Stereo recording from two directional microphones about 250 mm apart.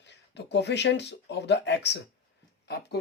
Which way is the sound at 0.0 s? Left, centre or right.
Left.